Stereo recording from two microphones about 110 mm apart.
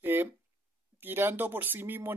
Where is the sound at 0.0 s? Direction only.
20° right (ahead or behind).